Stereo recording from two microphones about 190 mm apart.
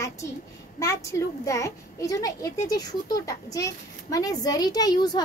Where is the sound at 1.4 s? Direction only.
15° left (ahead or behind).